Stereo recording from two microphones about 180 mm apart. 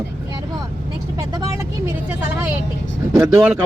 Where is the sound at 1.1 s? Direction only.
15° right (ahead or behind).